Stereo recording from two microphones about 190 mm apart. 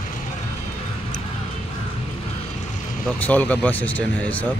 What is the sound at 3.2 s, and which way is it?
Speech, 10° left (ahead or behind).